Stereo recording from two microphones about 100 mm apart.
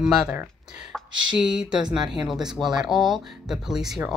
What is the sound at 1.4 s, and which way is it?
Speech, 10° right (ahead or behind).